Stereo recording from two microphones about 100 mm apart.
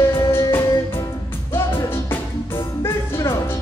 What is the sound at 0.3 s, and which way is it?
Music, 25° left (ahead or behind).